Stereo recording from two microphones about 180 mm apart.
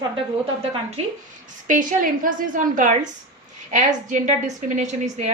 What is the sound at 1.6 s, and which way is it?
A woman's voice, 45° right (ahead or behind).